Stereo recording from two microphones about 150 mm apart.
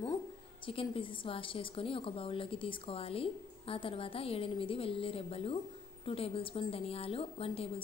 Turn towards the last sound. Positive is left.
turn(degrees=40)  # may be behind; listen again after turning